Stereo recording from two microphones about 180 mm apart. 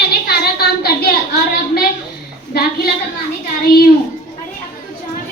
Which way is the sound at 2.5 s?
60° left (ahead or behind).